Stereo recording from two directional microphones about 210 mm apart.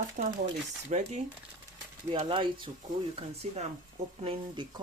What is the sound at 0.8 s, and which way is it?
Speech, 35° right (ahead or behind).